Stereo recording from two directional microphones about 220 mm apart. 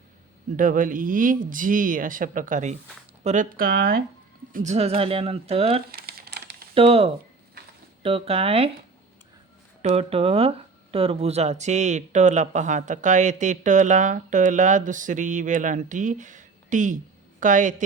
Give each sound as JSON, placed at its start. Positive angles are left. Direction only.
{"t": 0.5, "sound": "speech", "side_deg": -40}
{"t": 5.9, "sound": "a sound", "side_deg": -45}
{"t": 6.7, "sound": "speech", "side_deg": -25}
{"t": 7.6, "sound": "a sound", "side_deg": -45}
{"t": 8.0, "sound": "speech", "side_deg": -25}
{"t": 9.8, "sound": "speech", "side_deg": -25}